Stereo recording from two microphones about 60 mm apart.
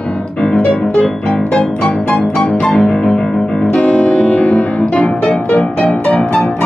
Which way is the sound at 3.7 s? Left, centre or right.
Left.